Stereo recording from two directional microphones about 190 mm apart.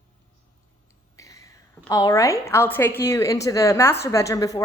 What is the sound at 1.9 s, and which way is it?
A woman's voice, 20° left (ahead or behind).